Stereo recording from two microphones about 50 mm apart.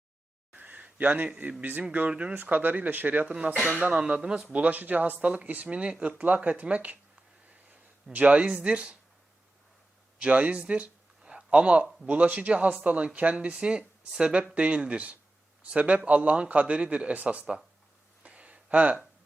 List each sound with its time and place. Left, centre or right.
0.5 s a sound: right
1.6 s a man's voice: right
2.3 s speech: right
3.3 s a man's voice: right
4.5 s a man's voice: right
8.1 s a man's voice: right
10.2 s a man's voice: right
11.3 s a sound: right
12.0 s a man's voice: right
18.2 s a sound: right